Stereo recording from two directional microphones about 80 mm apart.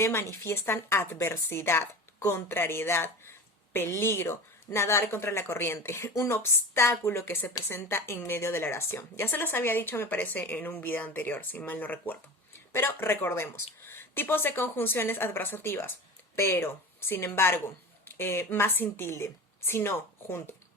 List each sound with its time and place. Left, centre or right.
0.0 s a woman's voice: left